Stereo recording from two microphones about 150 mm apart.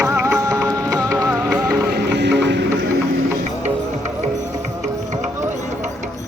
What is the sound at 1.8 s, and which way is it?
Boat, 90° right.